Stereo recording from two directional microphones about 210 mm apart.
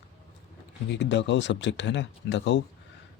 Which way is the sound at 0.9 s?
55° left (ahead or behind).